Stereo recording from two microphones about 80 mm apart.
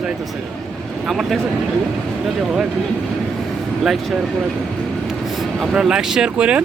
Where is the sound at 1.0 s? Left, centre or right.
Centre.